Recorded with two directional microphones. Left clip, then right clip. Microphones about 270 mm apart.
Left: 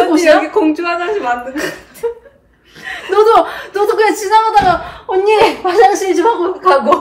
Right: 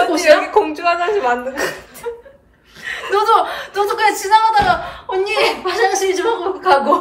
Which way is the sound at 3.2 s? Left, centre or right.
Centre.